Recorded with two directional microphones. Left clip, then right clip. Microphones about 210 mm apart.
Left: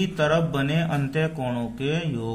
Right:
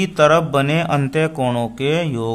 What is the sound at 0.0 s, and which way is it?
A man's voice, 35° right (ahead or behind).